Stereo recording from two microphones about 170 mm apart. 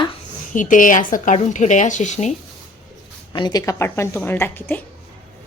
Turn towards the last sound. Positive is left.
turn(degrees=10)  # may be behind; listen again after turning